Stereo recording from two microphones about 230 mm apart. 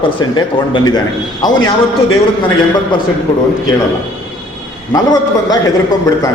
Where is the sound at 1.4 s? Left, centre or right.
Centre.